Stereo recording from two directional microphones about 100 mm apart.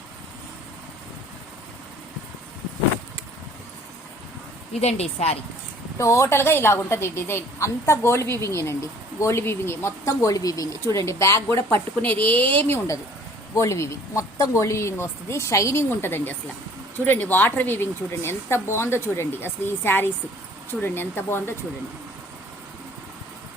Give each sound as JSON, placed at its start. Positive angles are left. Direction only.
{"t": 4.7, "sound": "a woman's voice", "side_deg": 90}
{"t": 6.0, "sound": "speech", "side_deg": 30}
{"t": 11.5, "sound": "a woman's voice", "side_deg": 20}
{"t": 13.5, "sound": "speech", "side_deg": 30}